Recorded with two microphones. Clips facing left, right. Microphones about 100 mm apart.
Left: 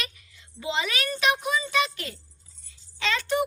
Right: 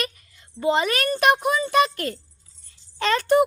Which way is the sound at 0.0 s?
45° right (ahead or behind).